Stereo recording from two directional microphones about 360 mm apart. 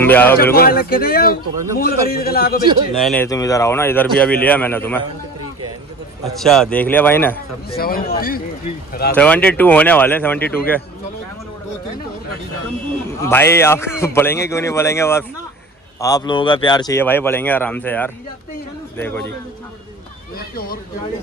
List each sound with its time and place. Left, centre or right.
0.0 s speech: centre
0.6 s a man's voice: left
3.0 s speech: centre
6.2 s speech: centre
7.7 s a man's voice: left
9.1 s speech: centre
13.1 s a man's voice: centre
20.3 s a man's voice: left